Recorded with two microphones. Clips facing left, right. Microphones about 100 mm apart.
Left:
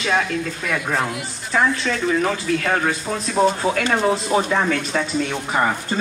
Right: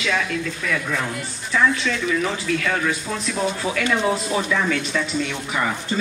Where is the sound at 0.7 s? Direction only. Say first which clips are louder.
Left 3 dB; 40° left (ahead or behind).